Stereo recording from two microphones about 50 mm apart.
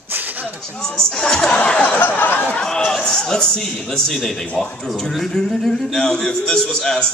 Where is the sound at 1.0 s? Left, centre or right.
Centre.